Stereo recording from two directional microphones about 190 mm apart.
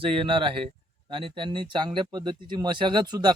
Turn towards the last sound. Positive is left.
turn(degrees=-20)  # may be behind; listen again after turning